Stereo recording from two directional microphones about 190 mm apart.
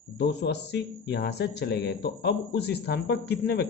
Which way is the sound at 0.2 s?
60° left (ahead or behind).